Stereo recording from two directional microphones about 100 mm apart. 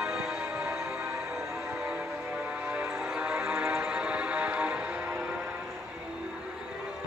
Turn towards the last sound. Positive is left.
turn(degrees=-15)  # may be behind; listen again after turning